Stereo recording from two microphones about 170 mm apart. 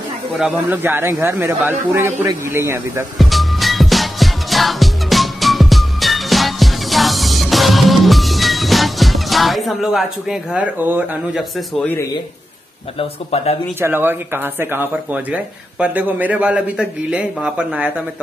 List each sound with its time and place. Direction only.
0.4 s speech: 5° right (ahead or behind)
3.2 s music: centre (ahead or behind)
11.8 s speech: 10° left (ahead or behind)
13.0 s speech: 40° left (ahead or behind)
13.7 s speech: 15° right (ahead or behind)